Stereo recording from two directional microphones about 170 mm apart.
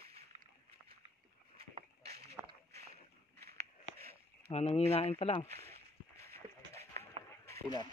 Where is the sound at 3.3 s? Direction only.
70° right (ahead or behind).